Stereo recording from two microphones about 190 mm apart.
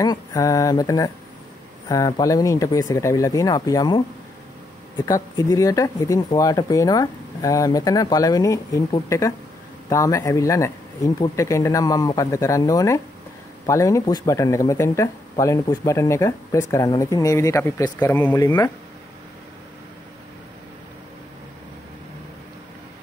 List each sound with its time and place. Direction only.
0.0 s speech: 20° left (ahead or behind)
5.0 s speech: 20° left (ahead or behind)